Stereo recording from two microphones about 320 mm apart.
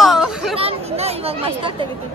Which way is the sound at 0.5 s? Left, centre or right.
Centre.